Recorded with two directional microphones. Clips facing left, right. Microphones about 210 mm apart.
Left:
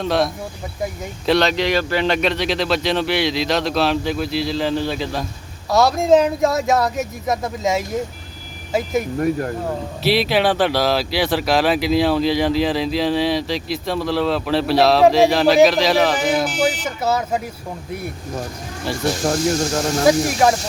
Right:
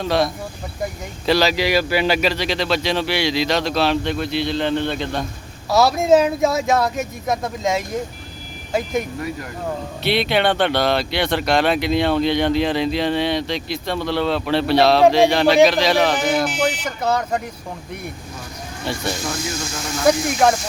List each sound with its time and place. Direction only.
0.0 s speech: centre (ahead or behind)
1.3 s speech: 5° right (ahead or behind)
18.9 s speech: centre (ahead or behind)
19.2 s speech: 45° left (ahead or behind)